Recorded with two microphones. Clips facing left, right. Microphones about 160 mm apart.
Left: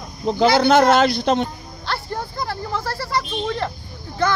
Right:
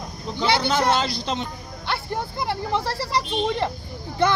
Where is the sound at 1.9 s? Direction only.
20° right (ahead or behind).